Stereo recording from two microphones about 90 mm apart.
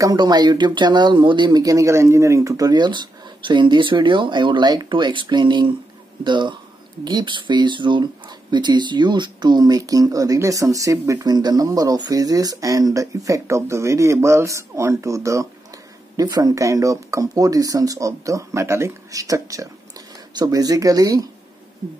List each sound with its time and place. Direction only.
0.0 s speech: 50° right (ahead or behind)
1.6 s speech: 35° right (ahead or behind)
2.7 s speech: 55° right (ahead or behind); by 15.4 s 35° right (ahead or behind)
16.2 s speech: 50° right (ahead or behind)